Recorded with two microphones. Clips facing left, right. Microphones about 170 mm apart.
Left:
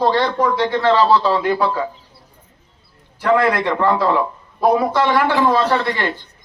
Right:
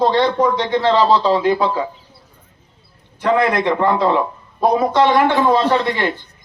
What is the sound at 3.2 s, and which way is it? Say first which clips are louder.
A man's voice: even; 20° right (ahead or behind).